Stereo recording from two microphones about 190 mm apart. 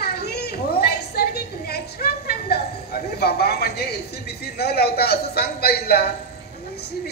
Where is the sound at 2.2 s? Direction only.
55° left (ahead or behind).